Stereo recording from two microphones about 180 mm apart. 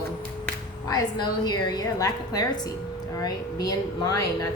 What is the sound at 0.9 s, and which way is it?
A woman's voice, 25° left (ahead or behind).